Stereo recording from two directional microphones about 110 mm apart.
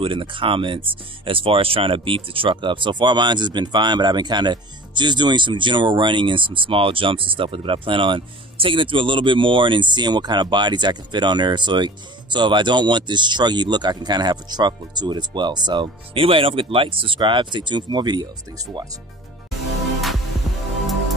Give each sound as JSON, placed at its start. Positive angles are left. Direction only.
{"t": 0.0, "sound": "speech", "side_deg": -50}